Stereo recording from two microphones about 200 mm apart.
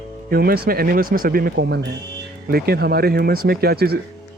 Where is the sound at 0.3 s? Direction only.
50° right (ahead or behind).